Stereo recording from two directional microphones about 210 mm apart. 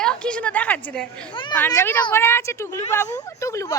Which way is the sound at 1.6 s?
10° left (ahead or behind).